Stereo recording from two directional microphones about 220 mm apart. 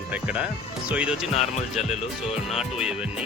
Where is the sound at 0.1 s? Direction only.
5° right (ahead or behind).